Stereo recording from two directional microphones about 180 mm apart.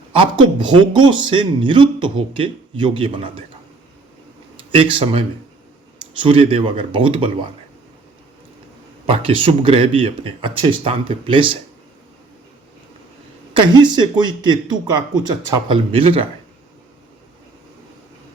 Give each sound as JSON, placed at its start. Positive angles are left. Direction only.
{"t": 0.1, "sound": "a man's voice", "side_deg": -30}
{"t": 4.7, "sound": "a man's voice", "side_deg": -30}
{"t": 9.0, "sound": "a man's voice", "side_deg": -30}
{"t": 13.5, "sound": "a man's voice", "side_deg": -25}